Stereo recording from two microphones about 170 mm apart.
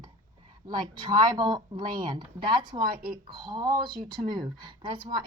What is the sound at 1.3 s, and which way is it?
Speech, 25° right (ahead or behind).